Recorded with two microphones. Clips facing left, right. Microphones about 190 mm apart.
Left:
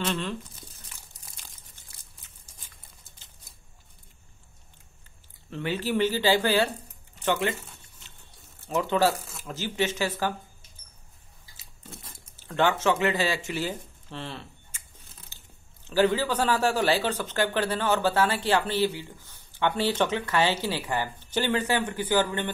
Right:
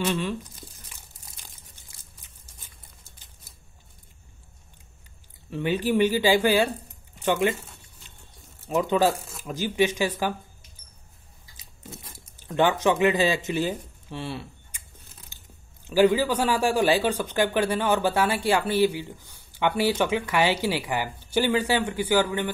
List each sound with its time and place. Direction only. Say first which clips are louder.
0.0 s speech: right 3 dB; 10° right (ahead or behind)
5.5 s speech: right 4 dB; 15° right (ahead or behind)
8.6 s speech: right 2 dB; 15° right (ahead or behind)
12.4 s speech: right 2 dB; 15° right (ahead or behind)
15.3 s a sound: right 1 dB; 15° right (ahead or behind)
15.8 s speech: right 4 dB; 15° right (ahead or behind)